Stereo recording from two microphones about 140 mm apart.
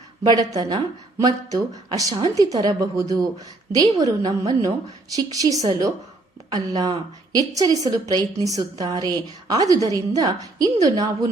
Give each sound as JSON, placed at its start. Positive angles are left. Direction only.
{"t": 0.2, "sound": "a woman's voice", "side_deg": -30}